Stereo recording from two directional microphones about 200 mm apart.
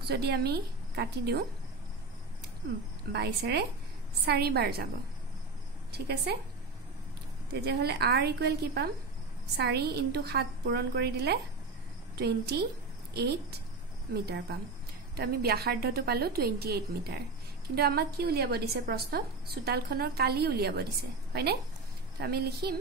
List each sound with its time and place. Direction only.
0.1 s a woman's voice: 55° right (ahead or behind)
3.1 s a woman's voice: 55° right (ahead or behind)
5.9 s a woman's voice: 55° right (ahead or behind)
7.6 s a woman's voice: 55° right (ahead or behind)